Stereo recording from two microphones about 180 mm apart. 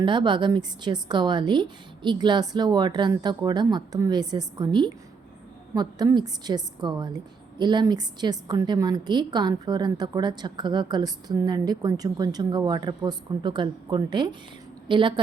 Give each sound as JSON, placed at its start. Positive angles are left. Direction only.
{"t": 0.0, "sound": "a woman's voice", "side_deg": -25}